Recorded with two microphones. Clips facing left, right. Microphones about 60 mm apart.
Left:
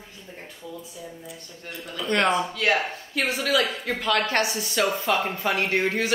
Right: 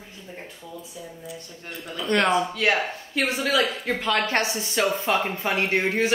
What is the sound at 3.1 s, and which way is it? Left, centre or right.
Speech, right.